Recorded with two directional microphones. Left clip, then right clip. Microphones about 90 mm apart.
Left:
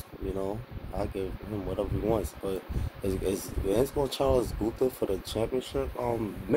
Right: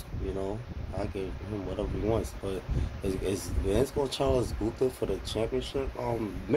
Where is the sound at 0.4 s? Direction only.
35° left (ahead or behind).